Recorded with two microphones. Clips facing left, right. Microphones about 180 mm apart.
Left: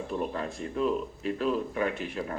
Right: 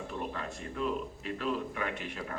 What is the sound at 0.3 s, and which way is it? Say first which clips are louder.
Speech: left 6 dB; 35° left (ahead or behind).